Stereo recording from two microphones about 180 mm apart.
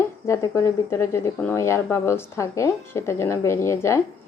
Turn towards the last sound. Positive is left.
turn(degrees=15)  # may be behind; listen again after turning